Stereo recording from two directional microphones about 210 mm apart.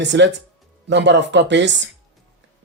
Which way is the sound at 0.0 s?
55° right (ahead or behind).